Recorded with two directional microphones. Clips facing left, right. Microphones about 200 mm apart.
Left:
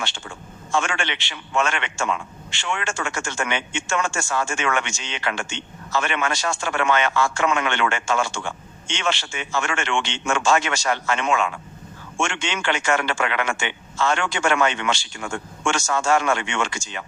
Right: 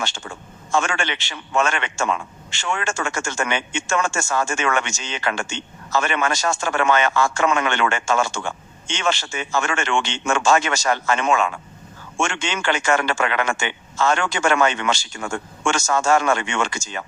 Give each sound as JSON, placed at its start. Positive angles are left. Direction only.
{"t": 0.0, "sound": "a man's voice", "side_deg": -45}